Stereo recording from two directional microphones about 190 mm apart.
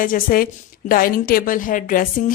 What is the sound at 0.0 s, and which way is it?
A woman's voice, 45° left (ahead or behind).